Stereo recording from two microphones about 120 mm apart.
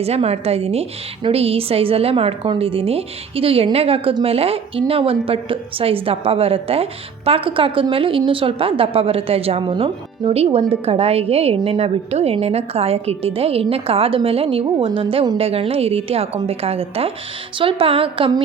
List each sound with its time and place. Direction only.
0.0 s a woman's voice: 60° right (ahead or behind); by 15.4 s 40° right (ahead or behind)
15.4 s a woman's voice: 55° right (ahead or behind)